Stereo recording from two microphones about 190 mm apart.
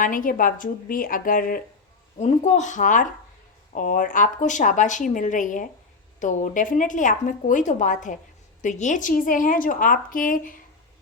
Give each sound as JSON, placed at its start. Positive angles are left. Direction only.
{"t": 0.0, "sound": "speech", "side_deg": 45}
{"t": 2.1, "sound": "a woman's voice", "side_deg": 35}